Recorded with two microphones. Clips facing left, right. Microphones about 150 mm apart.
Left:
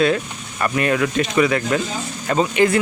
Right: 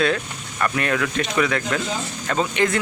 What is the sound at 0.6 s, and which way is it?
Speech, 15° left (ahead or behind).